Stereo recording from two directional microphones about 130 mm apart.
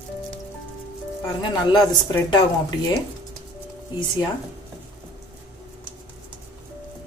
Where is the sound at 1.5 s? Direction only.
35° left (ahead or behind).